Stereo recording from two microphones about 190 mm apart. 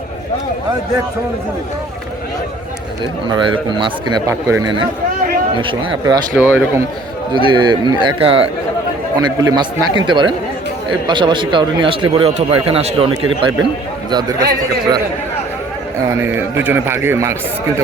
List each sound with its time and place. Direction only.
3.2 s speech: 25° right (ahead or behind)
6.3 s speech: 10° right (ahead or behind)
7.3 s speech: 25° right (ahead or behind)
16.0 s speech: 10° right (ahead or behind)